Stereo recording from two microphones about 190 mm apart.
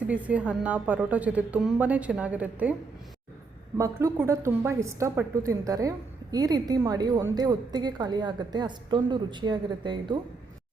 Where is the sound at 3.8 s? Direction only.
15° right (ahead or behind).